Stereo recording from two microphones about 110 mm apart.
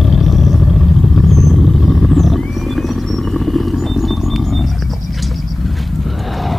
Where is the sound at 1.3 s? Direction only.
Centre (ahead or behind).